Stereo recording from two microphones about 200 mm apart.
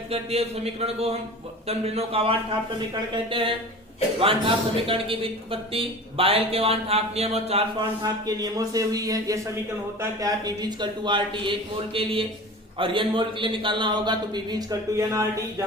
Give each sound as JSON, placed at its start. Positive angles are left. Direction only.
{"t": 0.1, "sound": "a man's voice", "side_deg": -30}
{"t": 8.0, "sound": "a man's voice", "side_deg": -20}